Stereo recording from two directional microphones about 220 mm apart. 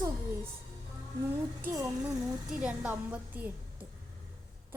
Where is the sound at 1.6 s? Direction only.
15° right (ahead or behind).